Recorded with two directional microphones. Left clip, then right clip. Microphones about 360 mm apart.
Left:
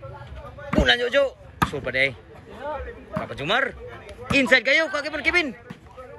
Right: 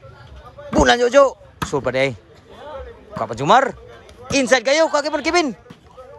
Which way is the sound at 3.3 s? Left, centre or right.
Centre.